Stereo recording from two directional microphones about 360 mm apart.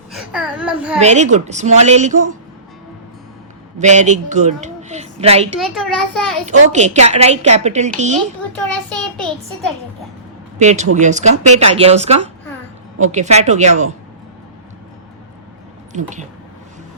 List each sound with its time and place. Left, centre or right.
0.1 s a child's voice: centre
0.9 s a woman's voice: centre
3.8 s a woman's voice: centre
5.5 s a child's voice: centre
6.5 s a woman's voice: centre
8.5 s a child's voice: centre
10.6 s a woman's voice: centre
15.9 s a woman's voice: centre